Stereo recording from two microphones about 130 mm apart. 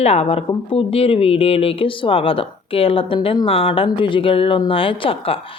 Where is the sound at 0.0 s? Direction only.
50° left (ahead or behind).